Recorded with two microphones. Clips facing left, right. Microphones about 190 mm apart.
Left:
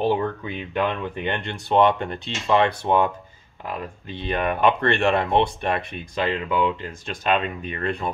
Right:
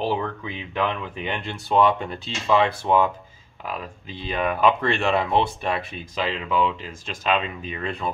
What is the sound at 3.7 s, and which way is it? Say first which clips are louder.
Speech: left 2 dB; 60° left (ahead or behind).